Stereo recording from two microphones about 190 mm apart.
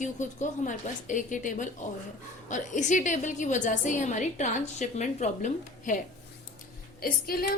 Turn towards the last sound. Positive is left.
turn(degrees=50)  # may be behind; listen again after turning